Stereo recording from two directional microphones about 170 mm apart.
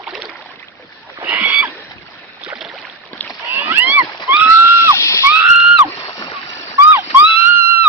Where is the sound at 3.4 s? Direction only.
10° right (ahead or behind).